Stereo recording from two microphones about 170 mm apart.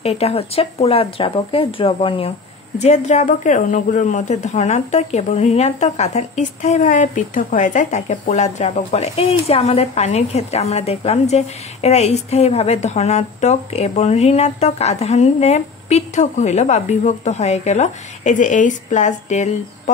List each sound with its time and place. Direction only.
0.0 s speech: 35° left (ahead or behind)